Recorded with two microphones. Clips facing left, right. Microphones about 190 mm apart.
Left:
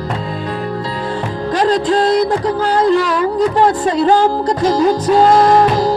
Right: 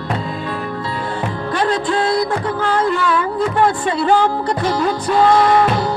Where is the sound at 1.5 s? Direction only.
40° left (ahead or behind).